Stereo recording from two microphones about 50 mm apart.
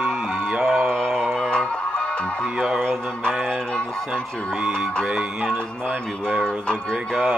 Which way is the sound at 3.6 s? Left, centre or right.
Centre.